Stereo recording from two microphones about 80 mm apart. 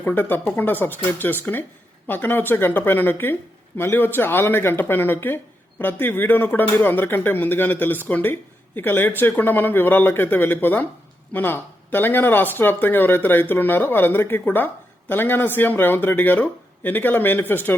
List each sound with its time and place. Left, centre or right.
0.0 s speech: left